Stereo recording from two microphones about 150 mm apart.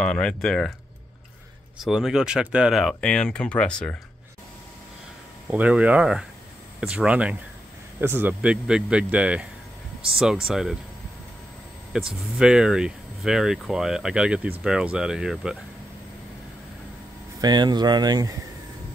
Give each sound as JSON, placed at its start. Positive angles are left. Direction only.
{"t": 0.0, "sound": "speech", "side_deg": 5}
{"t": 1.8, "sound": "speech", "side_deg": 0}
{"t": 5.5, "sound": "speech", "side_deg": -10}
{"t": 11.9, "sound": "speech", "side_deg": -5}
{"t": 17.4, "sound": "speech", "side_deg": -30}